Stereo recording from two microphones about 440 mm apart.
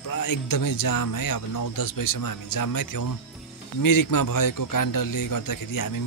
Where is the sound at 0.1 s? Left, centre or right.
Left.